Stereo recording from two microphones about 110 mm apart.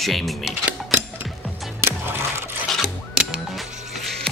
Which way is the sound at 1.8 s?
20° right (ahead or behind).